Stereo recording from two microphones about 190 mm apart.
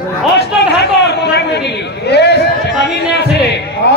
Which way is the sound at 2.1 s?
60° left (ahead or behind).